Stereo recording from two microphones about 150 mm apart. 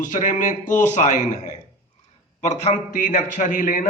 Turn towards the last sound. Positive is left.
turn(degrees=60)  # may be behind; listen again after turning